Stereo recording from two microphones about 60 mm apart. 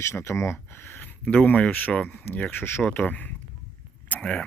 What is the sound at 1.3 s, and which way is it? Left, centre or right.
Speech, left.